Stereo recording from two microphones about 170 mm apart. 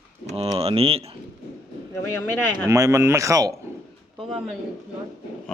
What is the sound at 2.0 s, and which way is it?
Speech, 15° left (ahead or behind).